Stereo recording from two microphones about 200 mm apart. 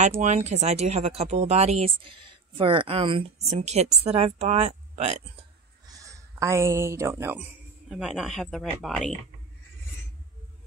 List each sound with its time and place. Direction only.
0.2 s speech: 35° right (ahead or behind)
5.9 s speech: 15° right (ahead or behind)
7.9 s speech: centre (ahead or behind)